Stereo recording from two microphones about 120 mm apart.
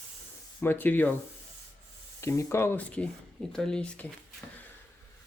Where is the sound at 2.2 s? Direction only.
25° left (ahead or behind); by 4.1 s 10° left (ahead or behind).